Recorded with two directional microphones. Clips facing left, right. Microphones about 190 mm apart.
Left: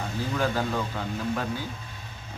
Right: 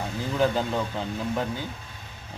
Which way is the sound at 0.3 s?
20° right (ahead or behind).